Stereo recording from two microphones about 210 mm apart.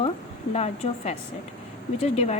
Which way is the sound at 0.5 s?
30° left (ahead or behind).